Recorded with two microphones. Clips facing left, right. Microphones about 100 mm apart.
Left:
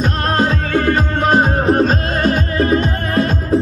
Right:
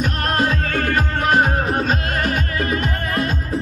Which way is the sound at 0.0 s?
25° left (ahead or behind).